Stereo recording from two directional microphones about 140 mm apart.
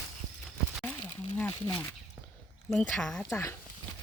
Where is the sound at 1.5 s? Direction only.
30° left (ahead or behind).